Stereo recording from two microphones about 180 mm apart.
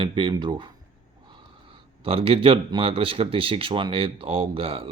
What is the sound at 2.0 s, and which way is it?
Speech, 30° right (ahead or behind).